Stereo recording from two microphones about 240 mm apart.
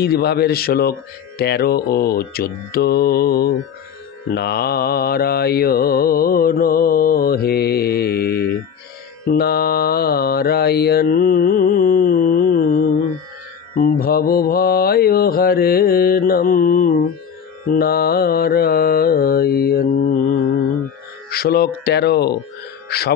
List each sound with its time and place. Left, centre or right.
0.0 s mantra: left
21.3 s mantra: left
22.8 s speech: left